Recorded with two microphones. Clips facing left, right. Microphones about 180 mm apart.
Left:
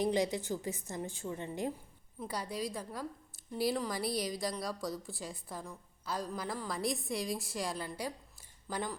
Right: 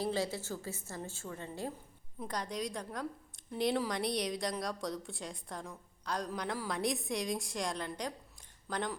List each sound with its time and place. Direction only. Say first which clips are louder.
0.0 s a woman's voice: left 3 dB; 15° left (ahead or behind)
2.2 s a woman's voice: even; 5° left (ahead or behind)